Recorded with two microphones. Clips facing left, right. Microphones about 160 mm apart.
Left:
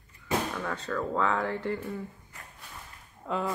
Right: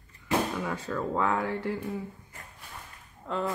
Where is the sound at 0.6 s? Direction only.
10° right (ahead or behind).